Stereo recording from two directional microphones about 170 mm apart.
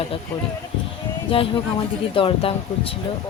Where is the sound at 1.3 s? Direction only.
30° left (ahead or behind).